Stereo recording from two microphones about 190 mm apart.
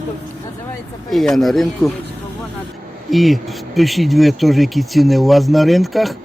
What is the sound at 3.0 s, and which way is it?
Speech, centre (ahead or behind).